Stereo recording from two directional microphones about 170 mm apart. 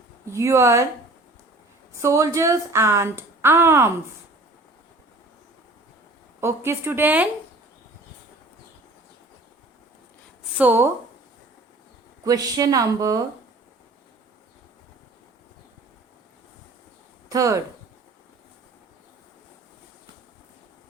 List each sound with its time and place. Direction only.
0.3 s speech: 15° right (ahead or behind)
1.9 s speech: 15° right (ahead or behind)
6.4 s speech: 15° right (ahead or behind)
10.6 s speech: 10° right (ahead or behind)
12.2 s speech: 20° right (ahead or behind)
17.2 s speech: 20° right (ahead or behind)